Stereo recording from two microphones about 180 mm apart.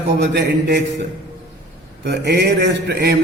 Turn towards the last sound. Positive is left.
turn(degrees=-65)  # may be behind; listen again after turning